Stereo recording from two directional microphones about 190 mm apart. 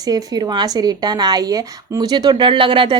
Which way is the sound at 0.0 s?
20° right (ahead or behind).